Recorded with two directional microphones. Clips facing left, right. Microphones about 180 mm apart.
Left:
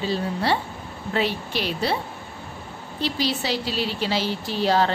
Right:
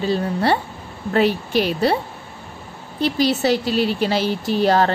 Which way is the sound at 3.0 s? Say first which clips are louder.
Right 7 dB; 50° right (ahead or behind).